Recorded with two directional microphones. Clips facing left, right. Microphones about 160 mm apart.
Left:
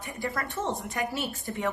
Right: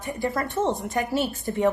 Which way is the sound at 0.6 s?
35° right (ahead or behind).